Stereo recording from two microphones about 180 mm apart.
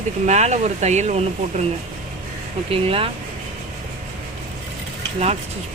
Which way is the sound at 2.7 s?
30° right (ahead or behind).